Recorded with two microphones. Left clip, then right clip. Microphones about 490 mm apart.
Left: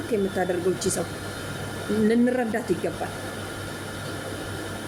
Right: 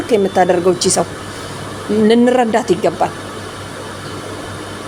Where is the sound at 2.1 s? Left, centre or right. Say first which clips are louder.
Right 13 dB; left.